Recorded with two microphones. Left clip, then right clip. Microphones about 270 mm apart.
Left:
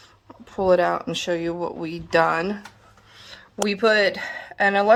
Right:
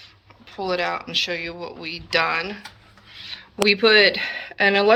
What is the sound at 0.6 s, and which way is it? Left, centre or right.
Speech, left.